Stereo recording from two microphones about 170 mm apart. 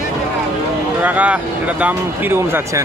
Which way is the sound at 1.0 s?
10° right (ahead or behind).